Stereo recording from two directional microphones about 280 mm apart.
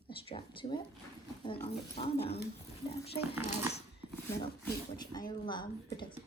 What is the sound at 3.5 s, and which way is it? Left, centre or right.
Speech, left.